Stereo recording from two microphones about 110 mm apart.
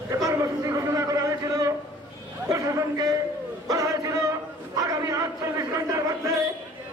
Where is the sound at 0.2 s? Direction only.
30° right (ahead or behind).